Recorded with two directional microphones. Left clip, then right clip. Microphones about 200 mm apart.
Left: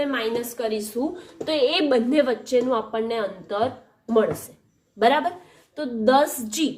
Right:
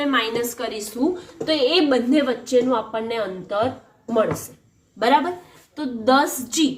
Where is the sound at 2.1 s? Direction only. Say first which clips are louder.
Right 1 dB; 55° left (ahead or behind).